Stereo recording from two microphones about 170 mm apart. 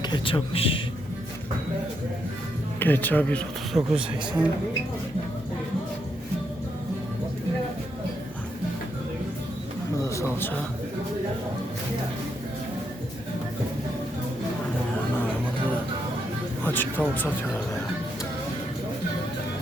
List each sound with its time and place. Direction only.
0.0 s a man's voice: 30° left (ahead or behind)
2.7 s speech: 10° left (ahead or behind); by 4.4 s 5° right (ahead or behind)
10.0 s speech: 15° left (ahead or behind)
16.6 s speech: 10° left (ahead or behind)